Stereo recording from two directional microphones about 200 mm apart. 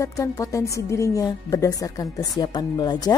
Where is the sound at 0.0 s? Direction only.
15° left (ahead or behind).